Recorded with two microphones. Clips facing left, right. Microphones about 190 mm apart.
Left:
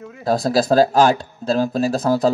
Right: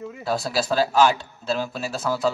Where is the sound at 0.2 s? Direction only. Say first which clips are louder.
Left 8 dB; 40° left (ahead or behind).